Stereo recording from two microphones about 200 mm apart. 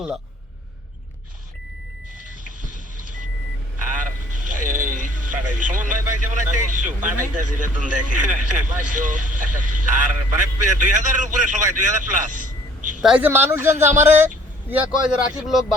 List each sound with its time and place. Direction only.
2.6 s vehicle: 40° right (ahead or behind)
4.5 s speech: 40° right (ahead or behind)
13.0 s speech: 5° right (ahead or behind)